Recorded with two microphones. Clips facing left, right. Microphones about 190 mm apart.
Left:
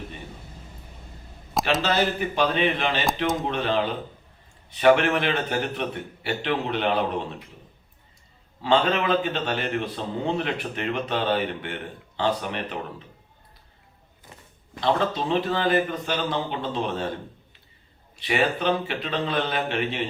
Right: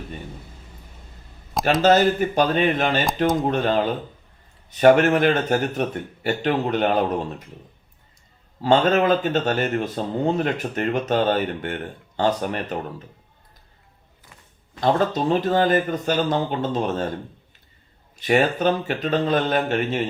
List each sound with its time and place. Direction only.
1.8 s speech: 45° right (ahead or behind)
8.6 s speech: 45° right (ahead or behind)
14.8 s speech: 45° right (ahead or behind)
18.2 s speech: 45° right (ahead or behind)